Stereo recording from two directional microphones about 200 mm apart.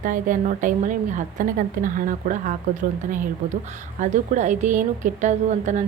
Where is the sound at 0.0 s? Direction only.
40° right (ahead or behind).